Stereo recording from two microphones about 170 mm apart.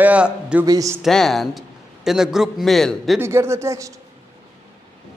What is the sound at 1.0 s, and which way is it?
Speech, centre (ahead or behind).